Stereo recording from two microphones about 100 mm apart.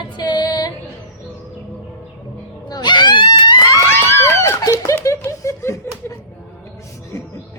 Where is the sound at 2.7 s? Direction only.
45° left (ahead or behind).